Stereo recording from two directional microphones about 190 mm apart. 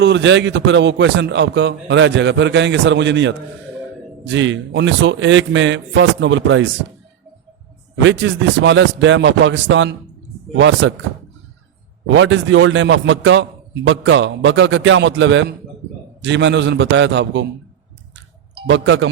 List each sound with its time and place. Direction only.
0.0 s a man's voice: 70° right (ahead or behind)
7.9 s a man's voice: 75° right (ahead or behind)
12.0 s a man's voice: 80° right
18.7 s a man's voice: 80° right